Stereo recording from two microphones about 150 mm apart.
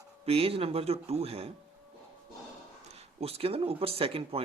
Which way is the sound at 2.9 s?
40° right (ahead or behind).